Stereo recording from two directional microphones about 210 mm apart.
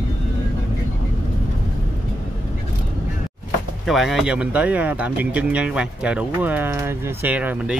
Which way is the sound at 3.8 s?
Centre (ahead or behind).